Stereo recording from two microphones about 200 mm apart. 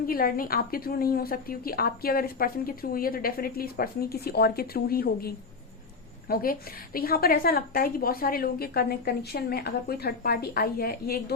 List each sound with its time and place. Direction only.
0.1 s a woman's voice: 45° left (ahead or behind)